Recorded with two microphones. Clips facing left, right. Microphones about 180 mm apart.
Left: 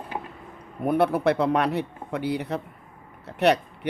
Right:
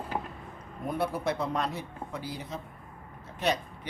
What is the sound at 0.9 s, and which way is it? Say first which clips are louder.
A man's voice: left 9 dB; 65° left (ahead or behind).